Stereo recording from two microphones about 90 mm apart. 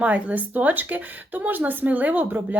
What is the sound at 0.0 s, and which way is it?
Speech, 15° right (ahead or behind).